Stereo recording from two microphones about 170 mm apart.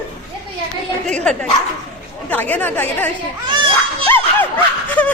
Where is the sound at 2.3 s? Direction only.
10° left (ahead or behind).